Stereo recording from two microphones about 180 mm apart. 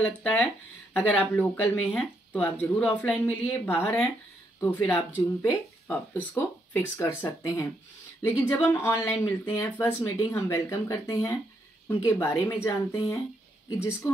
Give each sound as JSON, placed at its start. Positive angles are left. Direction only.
{"t": 0.0, "sound": "speech", "side_deg": 10}